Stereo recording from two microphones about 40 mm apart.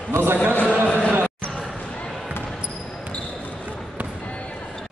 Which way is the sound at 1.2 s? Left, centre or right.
Left.